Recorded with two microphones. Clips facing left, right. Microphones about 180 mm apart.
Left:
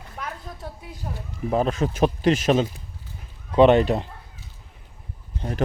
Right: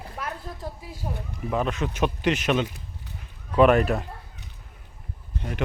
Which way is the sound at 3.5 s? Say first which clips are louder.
Left 3 dB; 30° left (ahead or behind).